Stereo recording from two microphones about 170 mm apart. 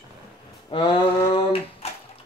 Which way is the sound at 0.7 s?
30° left (ahead or behind).